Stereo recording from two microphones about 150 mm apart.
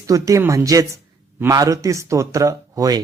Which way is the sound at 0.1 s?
20° right (ahead or behind).